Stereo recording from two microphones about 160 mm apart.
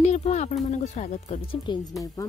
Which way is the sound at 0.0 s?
45° left (ahead or behind).